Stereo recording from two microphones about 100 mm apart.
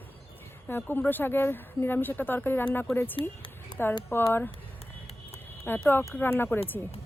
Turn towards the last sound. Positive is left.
turn(degrees=20)  # may be behind; listen again after turning